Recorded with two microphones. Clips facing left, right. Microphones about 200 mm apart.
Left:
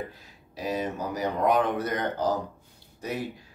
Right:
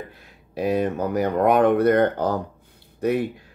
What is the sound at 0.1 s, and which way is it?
Speech, 60° right (ahead or behind).